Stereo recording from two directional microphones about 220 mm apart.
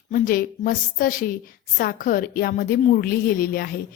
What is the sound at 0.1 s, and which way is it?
A woman's voice, 40° left (ahead or behind).